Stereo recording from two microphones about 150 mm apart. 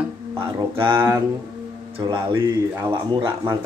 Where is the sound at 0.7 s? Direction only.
35° right (ahead or behind).